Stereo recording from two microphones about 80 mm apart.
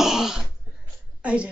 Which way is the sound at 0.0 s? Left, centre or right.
Centre.